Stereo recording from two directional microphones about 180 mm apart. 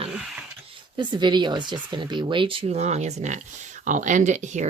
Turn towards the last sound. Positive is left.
turn(degrees=-40)  # may be behind; listen again after turning